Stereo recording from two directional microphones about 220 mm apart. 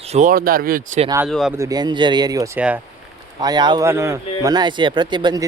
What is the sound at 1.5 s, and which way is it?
Speech, 15° right (ahead or behind).